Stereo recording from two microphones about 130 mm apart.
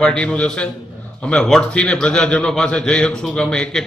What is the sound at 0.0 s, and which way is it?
A man's voice, 5° left (ahead or behind).